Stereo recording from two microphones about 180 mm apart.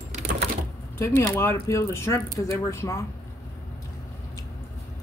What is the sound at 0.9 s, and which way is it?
Speech, 15° left (ahead or behind).